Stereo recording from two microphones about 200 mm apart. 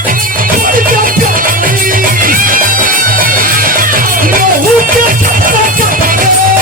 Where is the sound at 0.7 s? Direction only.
45° right (ahead or behind).